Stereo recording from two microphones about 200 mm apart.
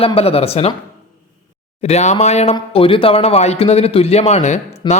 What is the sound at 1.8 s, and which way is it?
Speech, 35° left (ahead or behind).